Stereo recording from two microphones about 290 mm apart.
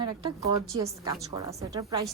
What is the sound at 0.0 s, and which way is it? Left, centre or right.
A woman's voice, centre.